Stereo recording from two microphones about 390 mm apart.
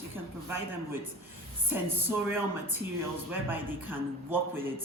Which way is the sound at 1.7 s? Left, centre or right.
Centre.